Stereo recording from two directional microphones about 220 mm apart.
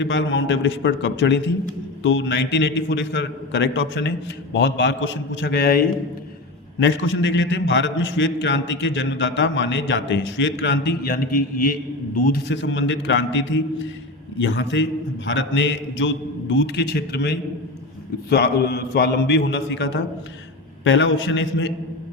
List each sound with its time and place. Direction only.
0.0 s a man's voice: 55° left (ahead or behind)